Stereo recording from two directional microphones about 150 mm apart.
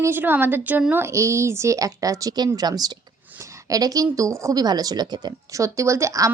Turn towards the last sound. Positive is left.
turn(degrees=-20)  # may be behind; listen again after turning